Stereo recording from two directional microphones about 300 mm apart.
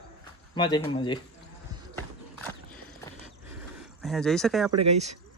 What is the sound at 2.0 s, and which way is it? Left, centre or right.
Horse, centre.